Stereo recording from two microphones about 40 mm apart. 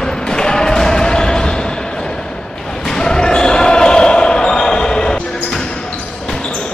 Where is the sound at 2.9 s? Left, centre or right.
Centre.